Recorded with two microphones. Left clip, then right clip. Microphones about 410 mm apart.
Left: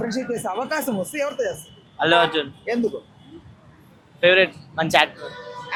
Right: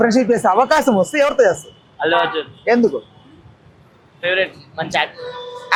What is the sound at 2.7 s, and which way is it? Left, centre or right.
Speech, centre.